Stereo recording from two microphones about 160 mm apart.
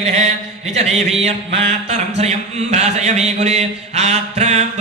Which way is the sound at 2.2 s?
45° right (ahead or behind).